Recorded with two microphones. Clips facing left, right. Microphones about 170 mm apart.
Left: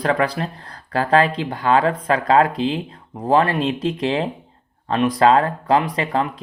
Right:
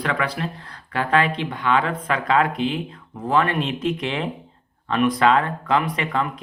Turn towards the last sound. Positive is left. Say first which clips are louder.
# left 3 dB
turn(degrees=35)  # may be behind; listen again after turning